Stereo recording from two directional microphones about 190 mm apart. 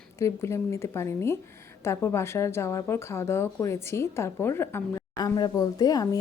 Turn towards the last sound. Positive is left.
turn(degrees=20)  # may be behind; listen again after turning